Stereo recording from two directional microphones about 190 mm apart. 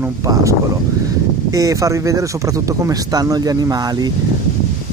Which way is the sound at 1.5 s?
15° right (ahead or behind).